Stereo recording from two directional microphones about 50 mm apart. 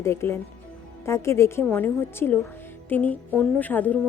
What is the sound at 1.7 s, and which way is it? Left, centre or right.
Speech, left.